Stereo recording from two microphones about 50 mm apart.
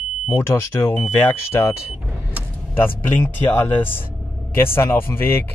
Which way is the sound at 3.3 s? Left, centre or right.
Left.